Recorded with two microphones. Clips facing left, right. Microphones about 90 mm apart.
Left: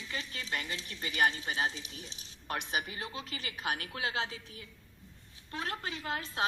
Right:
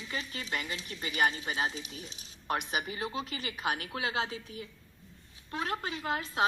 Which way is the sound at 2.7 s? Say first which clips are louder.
Right 3 dB; 25° right (ahead or behind).